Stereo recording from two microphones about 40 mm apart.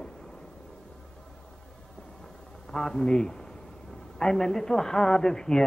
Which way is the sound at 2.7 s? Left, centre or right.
Centre.